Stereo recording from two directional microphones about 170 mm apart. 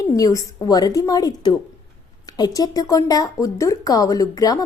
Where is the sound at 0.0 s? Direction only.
20° left (ahead or behind).